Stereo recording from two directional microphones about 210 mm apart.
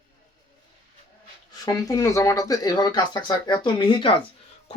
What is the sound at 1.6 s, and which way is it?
Speech, 15° left (ahead or behind).